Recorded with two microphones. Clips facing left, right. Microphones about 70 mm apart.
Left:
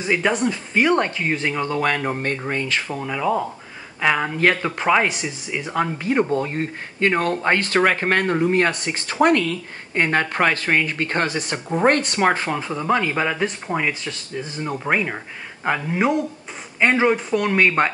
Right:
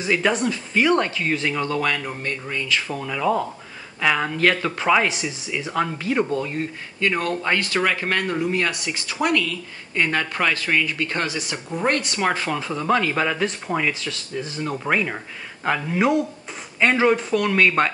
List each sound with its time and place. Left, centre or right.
0.4 s speech: left
3.0 s speech: centre
4.4 s speech: left
14.0 s speech: left